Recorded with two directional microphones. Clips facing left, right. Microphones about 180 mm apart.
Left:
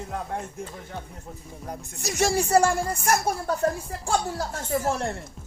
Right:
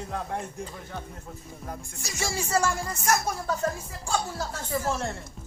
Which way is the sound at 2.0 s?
65° left (ahead or behind).